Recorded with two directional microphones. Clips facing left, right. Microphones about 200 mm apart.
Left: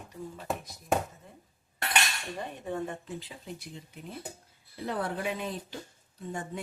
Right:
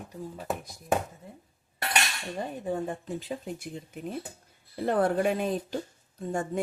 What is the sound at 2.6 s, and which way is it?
Speech, 30° right (ahead or behind).